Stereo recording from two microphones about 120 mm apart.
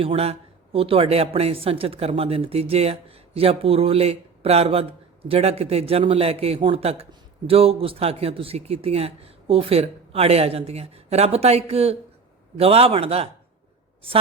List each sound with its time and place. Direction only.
0.0 s speech: 55° right (ahead or behind)